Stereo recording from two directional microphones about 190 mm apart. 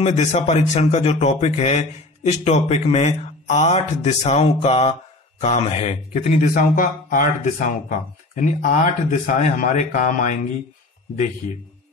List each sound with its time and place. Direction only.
0.0 s speech: 35° left (ahead or behind)